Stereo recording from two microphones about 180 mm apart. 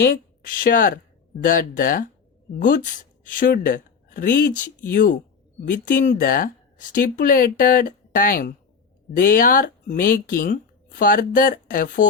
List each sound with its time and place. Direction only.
0.0 s speech: 50° left (ahead or behind)